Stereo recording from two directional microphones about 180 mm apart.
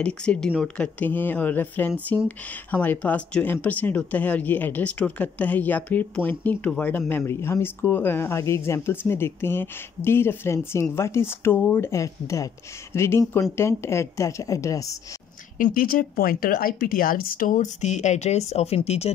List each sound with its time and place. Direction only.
0.0 s speech: 5° left (ahead or behind)
15.5 s speech: 50° left (ahead or behind)